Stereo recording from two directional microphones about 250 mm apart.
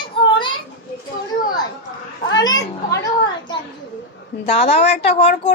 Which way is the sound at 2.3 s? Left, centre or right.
Centre.